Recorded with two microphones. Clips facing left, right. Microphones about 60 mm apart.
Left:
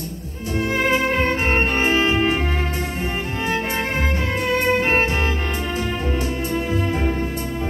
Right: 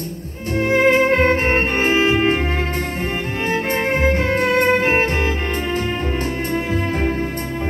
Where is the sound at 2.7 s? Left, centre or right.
Right.